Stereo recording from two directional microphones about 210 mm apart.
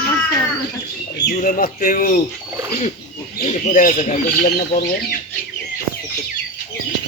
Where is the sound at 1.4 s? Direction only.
40° left (ahead or behind).